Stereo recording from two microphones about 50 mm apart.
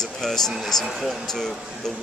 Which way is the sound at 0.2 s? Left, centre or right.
Centre.